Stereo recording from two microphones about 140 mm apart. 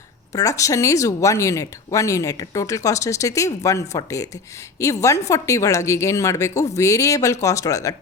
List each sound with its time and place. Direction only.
0.3 s speech: 25° left (ahead or behind)